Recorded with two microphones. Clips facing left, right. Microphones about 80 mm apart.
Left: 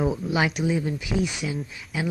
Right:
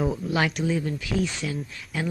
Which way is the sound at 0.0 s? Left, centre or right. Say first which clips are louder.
Left 1 dB; centre.